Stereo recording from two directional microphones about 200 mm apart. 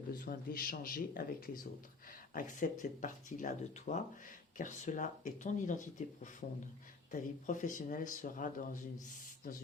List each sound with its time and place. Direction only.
0.1 s speech: 45° left (ahead or behind)